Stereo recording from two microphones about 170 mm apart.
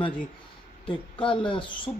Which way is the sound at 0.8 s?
30° left (ahead or behind).